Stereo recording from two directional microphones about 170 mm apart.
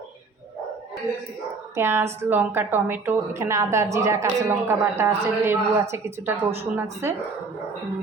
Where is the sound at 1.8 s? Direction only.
15° right (ahead or behind).